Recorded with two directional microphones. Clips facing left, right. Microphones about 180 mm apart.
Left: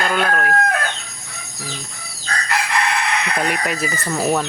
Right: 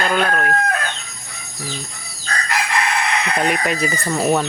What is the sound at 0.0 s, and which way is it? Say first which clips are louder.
Speech: right 1 dB; centre (ahead or behind).